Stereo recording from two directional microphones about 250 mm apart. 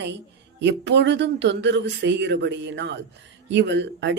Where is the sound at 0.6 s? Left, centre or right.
Right.